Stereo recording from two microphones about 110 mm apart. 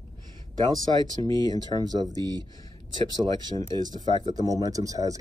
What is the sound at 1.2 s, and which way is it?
Speech, 35° left (ahead or behind).